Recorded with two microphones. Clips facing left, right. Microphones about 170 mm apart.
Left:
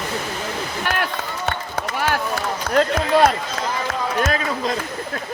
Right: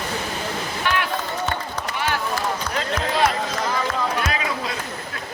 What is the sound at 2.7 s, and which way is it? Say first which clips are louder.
Run: left 12 dB; 50° left (ahead or behind).